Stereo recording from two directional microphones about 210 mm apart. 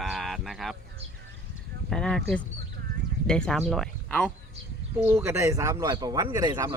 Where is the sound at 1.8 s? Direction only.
5° left (ahead or behind).